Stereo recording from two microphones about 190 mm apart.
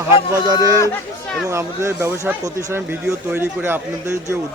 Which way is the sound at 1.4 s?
15° right (ahead or behind).